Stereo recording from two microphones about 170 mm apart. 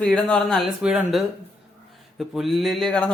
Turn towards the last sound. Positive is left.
turn(degrees=5)  # may be behind; listen again after turning